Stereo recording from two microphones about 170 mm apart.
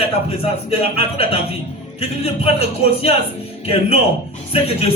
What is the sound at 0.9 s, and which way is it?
A man's voice, 35° left (ahead or behind).